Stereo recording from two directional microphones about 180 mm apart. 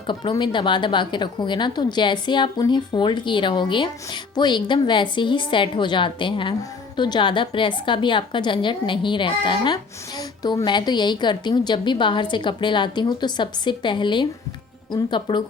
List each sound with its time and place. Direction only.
0.1 s a woman's voice: 25° left (ahead or behind)